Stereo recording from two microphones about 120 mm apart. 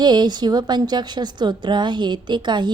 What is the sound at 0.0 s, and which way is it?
A woman's voice, 35° right (ahead or behind).